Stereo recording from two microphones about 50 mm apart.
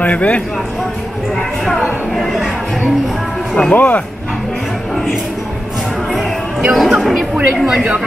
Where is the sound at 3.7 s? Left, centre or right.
Left.